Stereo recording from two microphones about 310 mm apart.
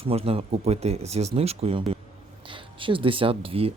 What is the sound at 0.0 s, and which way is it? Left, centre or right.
Speech, centre.